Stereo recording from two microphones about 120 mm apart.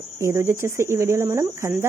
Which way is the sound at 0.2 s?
25° right (ahead or behind).